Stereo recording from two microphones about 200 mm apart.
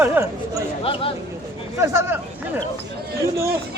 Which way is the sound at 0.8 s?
25° left (ahead or behind).